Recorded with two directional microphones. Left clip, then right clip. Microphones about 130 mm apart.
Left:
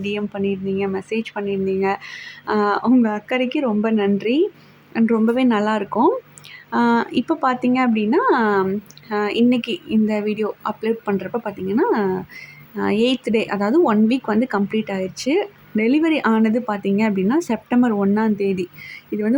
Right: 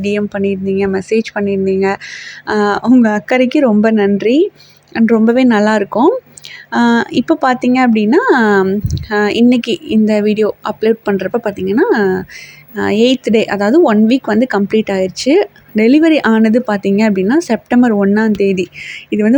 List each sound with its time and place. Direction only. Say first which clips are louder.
0.0 s speech: right 8 dB; 30° right (ahead or behind)